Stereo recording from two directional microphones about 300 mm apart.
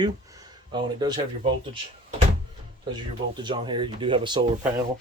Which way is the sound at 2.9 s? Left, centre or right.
Centre.